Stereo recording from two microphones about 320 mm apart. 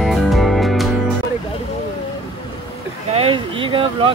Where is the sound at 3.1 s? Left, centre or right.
Centre.